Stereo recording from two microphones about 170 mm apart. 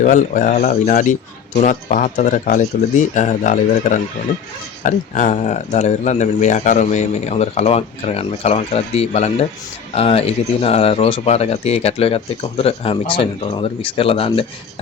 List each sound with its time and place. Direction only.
0.0 s speech: 50° left (ahead or behind)